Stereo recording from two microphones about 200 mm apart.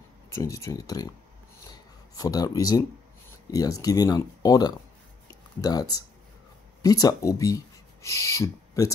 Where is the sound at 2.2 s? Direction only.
20° left (ahead or behind).